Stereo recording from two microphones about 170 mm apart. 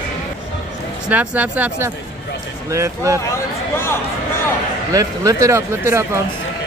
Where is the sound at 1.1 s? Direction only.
10° right (ahead or behind).